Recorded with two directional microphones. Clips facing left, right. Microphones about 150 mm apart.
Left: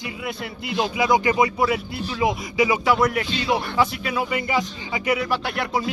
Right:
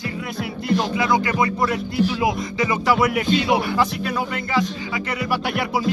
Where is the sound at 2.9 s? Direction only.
5° right (ahead or behind).